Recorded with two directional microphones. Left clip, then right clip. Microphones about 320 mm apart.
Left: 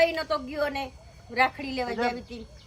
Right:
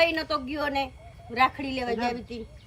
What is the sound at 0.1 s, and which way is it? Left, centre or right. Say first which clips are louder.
A woman's voice: right 1 dB; centre.